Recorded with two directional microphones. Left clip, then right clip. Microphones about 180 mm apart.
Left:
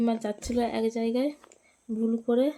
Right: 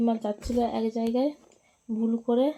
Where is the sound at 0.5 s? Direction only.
10° left (ahead or behind).